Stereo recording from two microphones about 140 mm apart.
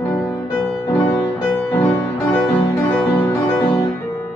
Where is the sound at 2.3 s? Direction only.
10° left (ahead or behind).